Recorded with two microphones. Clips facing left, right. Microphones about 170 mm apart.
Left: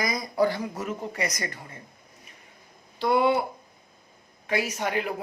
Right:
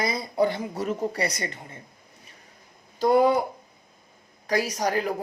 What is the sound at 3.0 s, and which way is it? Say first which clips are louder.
Speech: right 3 dB; 40° right (ahead or behind).